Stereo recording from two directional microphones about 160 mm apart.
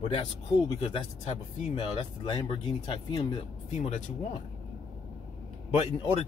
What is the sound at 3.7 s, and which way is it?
Speech, 45° left (ahead or behind).